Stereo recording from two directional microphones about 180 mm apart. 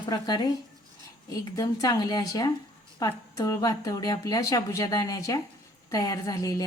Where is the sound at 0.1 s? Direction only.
25° left (ahead or behind).